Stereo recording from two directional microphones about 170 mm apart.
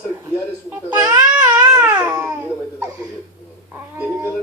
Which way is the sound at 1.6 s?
10° right (ahead or behind).